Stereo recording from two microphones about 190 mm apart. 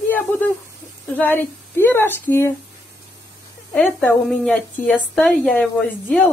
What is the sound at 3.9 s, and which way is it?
Speech, 5° left (ahead or behind).